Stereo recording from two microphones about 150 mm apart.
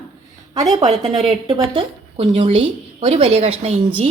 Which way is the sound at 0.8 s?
40° right (ahead or behind).